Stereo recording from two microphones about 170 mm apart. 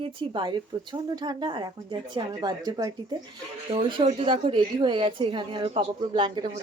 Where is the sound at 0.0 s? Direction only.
30° right (ahead or behind).